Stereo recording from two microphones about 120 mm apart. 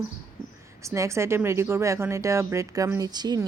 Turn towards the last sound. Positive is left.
turn(degrees=-35)  # may be behind; listen again after turning